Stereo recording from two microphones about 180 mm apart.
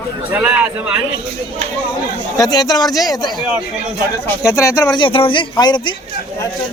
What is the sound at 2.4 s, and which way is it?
Speech, 20° left (ahead or behind).